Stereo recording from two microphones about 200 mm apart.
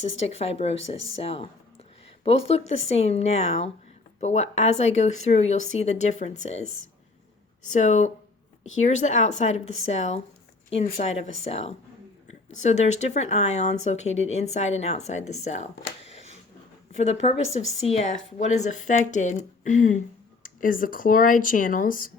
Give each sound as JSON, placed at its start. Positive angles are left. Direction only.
{"t": 0.0, "sound": "speech", "side_deg": 30}
{"t": 7.7, "sound": "speech", "side_deg": 35}